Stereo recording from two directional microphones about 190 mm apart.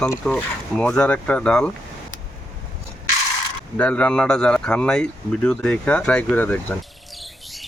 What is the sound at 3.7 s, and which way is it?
Speech, 5° left (ahead or behind).